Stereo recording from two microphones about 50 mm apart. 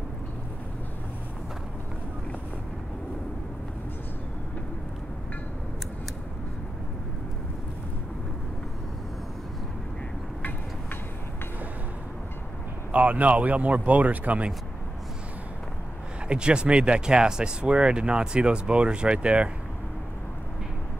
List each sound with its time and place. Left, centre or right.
12.9 s speech: right
16.3 s speech: centre